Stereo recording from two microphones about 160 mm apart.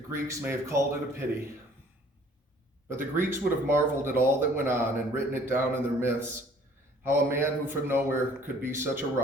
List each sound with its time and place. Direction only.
0.1 s speech: 15° right (ahead or behind)
2.9 s speech: 15° right (ahead or behind)